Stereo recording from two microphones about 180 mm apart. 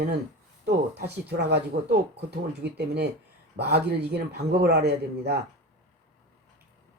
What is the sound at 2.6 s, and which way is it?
Speech, 70° right (ahead or behind).